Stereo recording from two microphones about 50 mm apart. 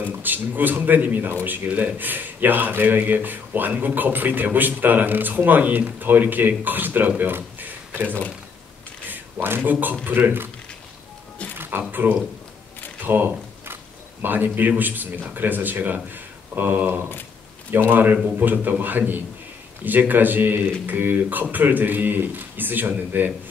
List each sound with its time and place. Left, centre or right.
0.2 s speech: right
2.0 s speech: right
7.2 s a sound: right
9.1 s a man's voice: right
11.5 s music: right
11.9 s speech: right